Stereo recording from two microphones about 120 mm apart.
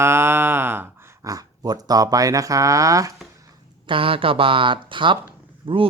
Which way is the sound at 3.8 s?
45° right (ahead or behind).